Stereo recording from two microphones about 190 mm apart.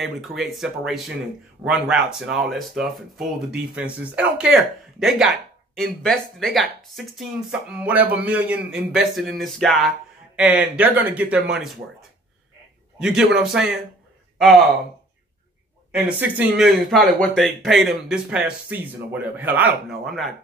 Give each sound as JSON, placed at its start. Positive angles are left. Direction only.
{"t": 0.0, "sound": "speech", "side_deg": 0}
{"t": 13.0, "sound": "speech", "side_deg": 0}
{"t": 16.2, "sound": "speech", "side_deg": -5}